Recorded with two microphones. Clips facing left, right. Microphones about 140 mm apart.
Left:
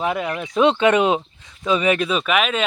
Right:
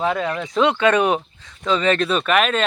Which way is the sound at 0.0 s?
15° left (ahead or behind).